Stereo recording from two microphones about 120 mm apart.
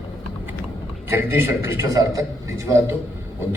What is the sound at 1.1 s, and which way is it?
A man's voice, 20° right (ahead or behind).